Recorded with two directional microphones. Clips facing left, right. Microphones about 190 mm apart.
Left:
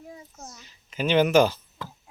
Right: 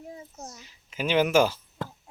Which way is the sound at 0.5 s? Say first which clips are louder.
Left 2 dB; 5° right (ahead or behind).